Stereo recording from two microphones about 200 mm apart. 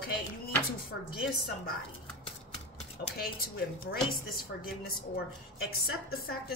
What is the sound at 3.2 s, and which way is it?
Speech, 50° left (ahead or behind).